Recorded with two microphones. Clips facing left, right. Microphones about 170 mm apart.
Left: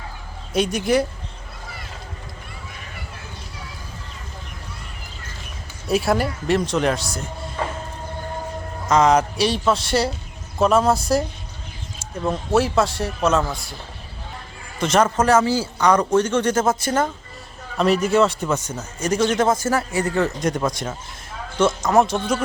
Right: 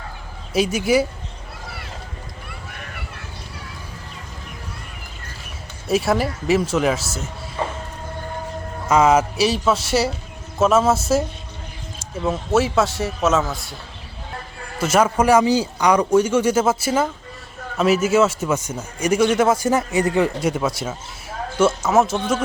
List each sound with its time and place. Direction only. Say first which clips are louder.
0.5 s speech: right 1 dB; 5° right (ahead or behind)
2.6 s a sound: right 2 dB; 60° right (ahead or behind)
5.9 s speech: right 1 dB; centre (ahead or behind)
8.9 s speech: right 1 dB; 5° right (ahead or behind)
12.2 s speech: right 1 dB; 5° right (ahead or behind)
14.8 s speech: right 1 dB; 5° right (ahead or behind)